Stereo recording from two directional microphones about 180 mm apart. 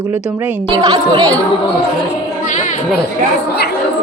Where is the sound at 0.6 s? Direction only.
25° right (ahead or behind).